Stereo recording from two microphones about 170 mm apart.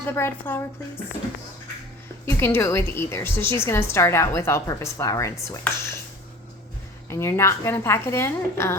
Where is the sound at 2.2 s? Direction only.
15° left (ahead or behind).